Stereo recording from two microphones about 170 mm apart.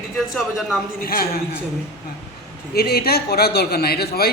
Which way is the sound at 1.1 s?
60° left (ahead or behind).